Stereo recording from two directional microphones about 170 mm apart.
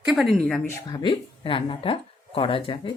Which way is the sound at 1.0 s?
30° left (ahead or behind).